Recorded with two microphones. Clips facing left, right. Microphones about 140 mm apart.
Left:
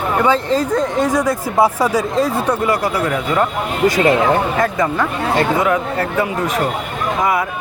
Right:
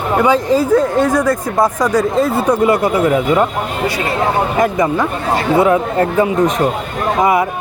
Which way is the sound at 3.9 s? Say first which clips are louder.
Left 6 dB; 45° left (ahead or behind).